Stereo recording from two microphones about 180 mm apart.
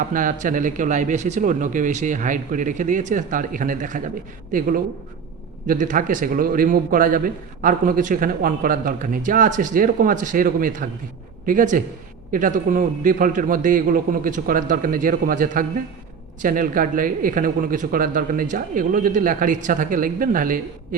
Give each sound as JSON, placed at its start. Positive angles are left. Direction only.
{"t": 0.1, "sound": "speech", "side_deg": -45}